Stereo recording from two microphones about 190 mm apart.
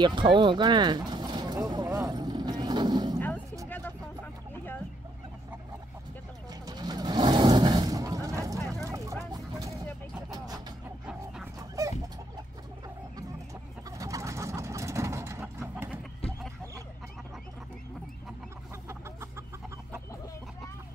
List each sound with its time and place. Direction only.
0.0 s a sound: 25° right (ahead or behind)
3.2 s a sound: 10° left (ahead or behind)
3.6 s vehicle: 10° left (ahead or behind)
6.6 s vehicle: 20° right (ahead or behind)
10.3 s music: 20° right (ahead or behind)
13.8 s vehicle: 20° right (ahead or behind)
15.6 s horse: 10° right (ahead or behind)